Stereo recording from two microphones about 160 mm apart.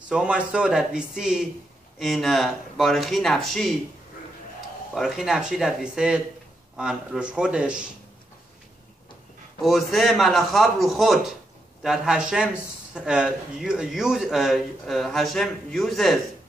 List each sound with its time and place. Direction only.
0.1 s speech: 5° right (ahead or behind)
4.9 s speech: centre (ahead or behind)
9.6 s speech: centre (ahead or behind)